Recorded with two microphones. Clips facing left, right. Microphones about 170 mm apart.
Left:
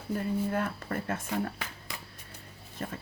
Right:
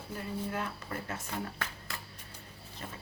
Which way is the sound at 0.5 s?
50° left (ahead or behind).